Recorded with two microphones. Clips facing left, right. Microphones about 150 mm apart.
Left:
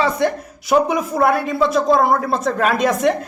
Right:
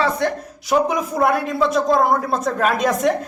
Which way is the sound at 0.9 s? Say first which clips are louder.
Left 2 dB; centre (ahead or behind).